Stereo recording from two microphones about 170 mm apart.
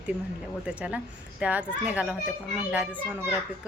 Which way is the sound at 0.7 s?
5° right (ahead or behind).